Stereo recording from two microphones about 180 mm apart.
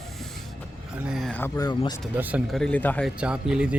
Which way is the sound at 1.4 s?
15° left (ahead or behind).